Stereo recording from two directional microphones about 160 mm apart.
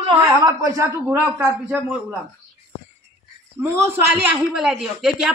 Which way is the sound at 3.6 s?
15° right (ahead or behind).